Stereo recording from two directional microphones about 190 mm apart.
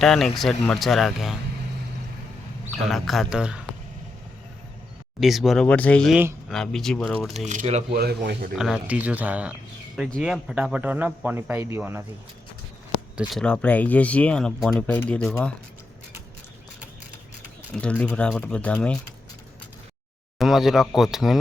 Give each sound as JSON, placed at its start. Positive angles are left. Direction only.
{"t": 0.0, "sound": "speech", "side_deg": 0}
{"t": 2.8, "sound": "speech", "side_deg": 0}
{"t": 5.2, "sound": "speech", "side_deg": 0}
{"t": 7.3, "sound": "speech", "side_deg": -35}
{"t": 7.9, "sound": "speech", "side_deg": -60}
{"t": 8.5, "sound": "speech", "side_deg": 0}
{"t": 13.1, "sound": "speech", "side_deg": 0}
{"t": 17.7, "sound": "speech", "side_deg": 5}
{"t": 20.4, "sound": "speech", "side_deg": 0}